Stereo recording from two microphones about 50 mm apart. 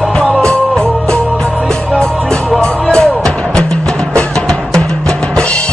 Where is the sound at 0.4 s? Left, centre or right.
Centre.